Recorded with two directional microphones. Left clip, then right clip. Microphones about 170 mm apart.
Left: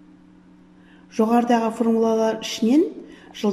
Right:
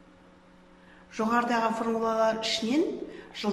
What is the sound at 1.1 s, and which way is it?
Speech, 50° left (ahead or behind).